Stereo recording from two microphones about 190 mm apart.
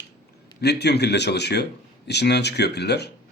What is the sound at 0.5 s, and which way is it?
A man's voice, 60° left (ahead or behind).